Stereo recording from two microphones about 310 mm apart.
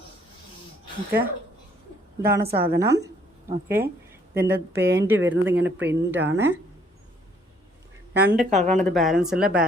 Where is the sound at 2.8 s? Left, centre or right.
Centre.